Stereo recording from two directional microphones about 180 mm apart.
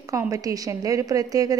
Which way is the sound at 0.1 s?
20° right (ahead or behind).